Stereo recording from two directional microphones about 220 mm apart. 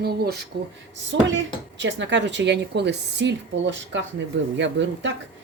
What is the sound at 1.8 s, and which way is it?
Speech, 55° right (ahead or behind).